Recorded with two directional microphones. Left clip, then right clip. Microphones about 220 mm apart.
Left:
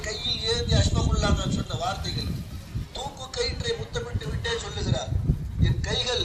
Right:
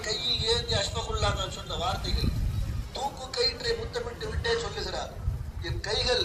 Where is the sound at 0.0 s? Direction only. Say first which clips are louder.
Even; centre (ahead or behind).